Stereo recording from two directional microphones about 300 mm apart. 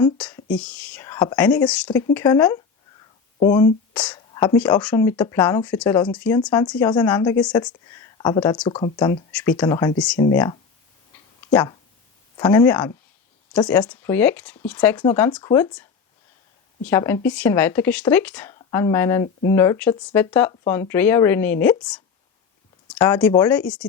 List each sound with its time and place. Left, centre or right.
0.0 s speech: centre
12.4 s speech: centre